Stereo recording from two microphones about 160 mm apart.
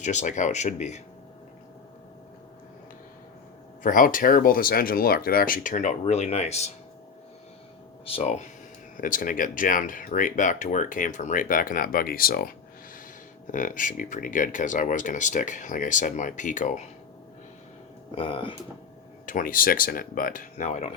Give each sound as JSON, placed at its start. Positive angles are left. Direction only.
{"t": 0.0, "sound": "speech", "side_deg": 50}
{"t": 3.8, "sound": "speech", "side_deg": 60}
{"t": 8.0, "sound": "speech", "side_deg": 40}
{"t": 9.0, "sound": "speech", "side_deg": 60}
{"t": 13.5, "sound": "speech", "side_deg": 55}
{"t": 18.1, "sound": "speech", "side_deg": 35}
{"t": 19.2, "sound": "speech", "side_deg": 55}